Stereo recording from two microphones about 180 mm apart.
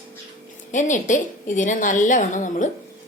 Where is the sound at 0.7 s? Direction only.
45° left (ahead or behind).